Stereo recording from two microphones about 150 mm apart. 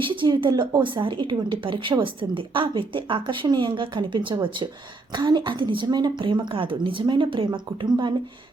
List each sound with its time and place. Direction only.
0.0 s speech: 35° right (ahead or behind)